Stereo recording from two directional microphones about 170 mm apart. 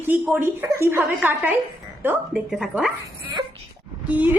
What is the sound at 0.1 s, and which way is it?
A woman's voice, 15° right (ahead or behind).